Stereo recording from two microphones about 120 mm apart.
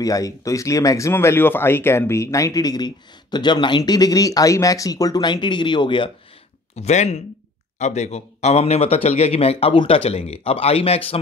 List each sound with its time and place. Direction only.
0.0 s speech: 30° left (ahead or behind)
6.7 s speech: 65° left (ahead or behind)